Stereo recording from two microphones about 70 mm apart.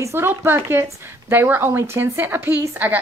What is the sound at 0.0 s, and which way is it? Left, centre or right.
Speech, right.